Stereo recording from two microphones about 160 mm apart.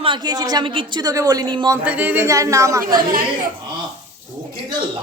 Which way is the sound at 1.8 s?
10° right (ahead or behind).